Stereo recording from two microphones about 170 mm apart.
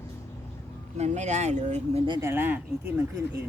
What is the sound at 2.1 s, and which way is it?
Speech, 15° right (ahead or behind).